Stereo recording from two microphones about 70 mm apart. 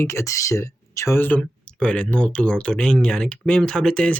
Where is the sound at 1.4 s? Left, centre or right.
Centre.